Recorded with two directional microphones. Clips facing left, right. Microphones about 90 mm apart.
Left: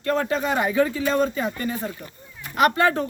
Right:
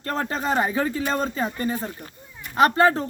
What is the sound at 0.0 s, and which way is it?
Speech, 35° right (ahead or behind).